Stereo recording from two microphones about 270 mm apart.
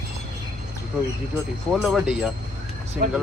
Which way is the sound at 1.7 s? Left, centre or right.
Centre.